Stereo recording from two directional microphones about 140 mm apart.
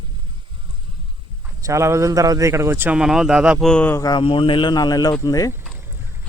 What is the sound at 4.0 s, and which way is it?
Speech, 30° left (ahead or behind).